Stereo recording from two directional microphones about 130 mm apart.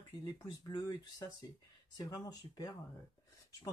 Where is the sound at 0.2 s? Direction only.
30° left (ahead or behind).